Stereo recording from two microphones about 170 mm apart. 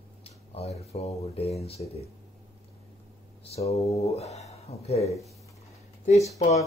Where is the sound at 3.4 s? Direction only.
40° left (ahead or behind).